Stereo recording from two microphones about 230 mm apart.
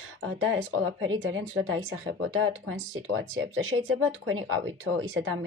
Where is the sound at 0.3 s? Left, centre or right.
Right.